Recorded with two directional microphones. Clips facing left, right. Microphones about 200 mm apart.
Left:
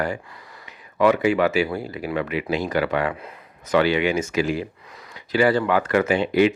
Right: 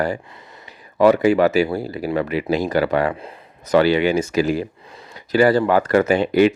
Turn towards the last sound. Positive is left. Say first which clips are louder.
# right 3 dB
turn(degrees=-40)  # may be behind; listen again after turning